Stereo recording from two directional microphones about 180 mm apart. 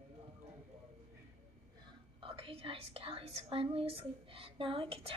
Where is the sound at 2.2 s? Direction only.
30° right (ahead or behind).